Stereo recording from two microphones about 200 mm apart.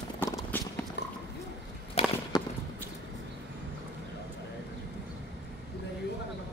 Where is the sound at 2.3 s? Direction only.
20° left (ahead or behind).